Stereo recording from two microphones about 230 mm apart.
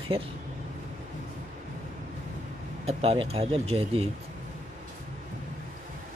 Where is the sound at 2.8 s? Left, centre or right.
Right.